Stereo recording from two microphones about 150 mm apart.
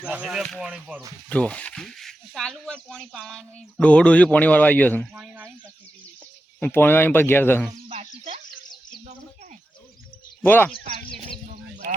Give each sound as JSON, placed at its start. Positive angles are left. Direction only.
{"t": 0.0, "sound": "speech", "side_deg": -5}
{"t": 1.3, "sound": "speech", "side_deg": 10}
{"t": 5.1, "sound": "a sound", "side_deg": -10}
{"t": 6.6, "sound": "speech", "side_deg": 15}
{"t": 9.0, "sound": "bird", "side_deg": -45}
{"t": 10.4, "sound": "speech", "side_deg": 15}